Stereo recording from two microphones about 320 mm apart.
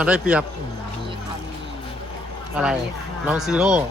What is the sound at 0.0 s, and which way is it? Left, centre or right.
Speech, centre.